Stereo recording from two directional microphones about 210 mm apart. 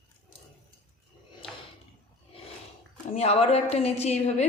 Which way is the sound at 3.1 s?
30° left (ahead or behind).